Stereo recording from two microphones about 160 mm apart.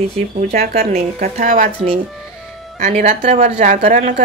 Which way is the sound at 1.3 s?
45° right (ahead or behind).